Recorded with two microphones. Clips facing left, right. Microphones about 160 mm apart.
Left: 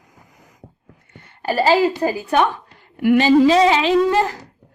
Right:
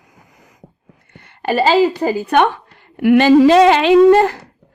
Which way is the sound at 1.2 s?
70° right (ahead or behind).